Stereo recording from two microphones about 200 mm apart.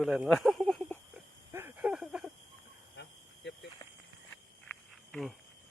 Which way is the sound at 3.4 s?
60° left (ahead or behind).